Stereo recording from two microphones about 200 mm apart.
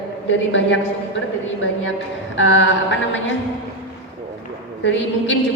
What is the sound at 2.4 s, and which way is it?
Speech, 65° left (ahead or behind).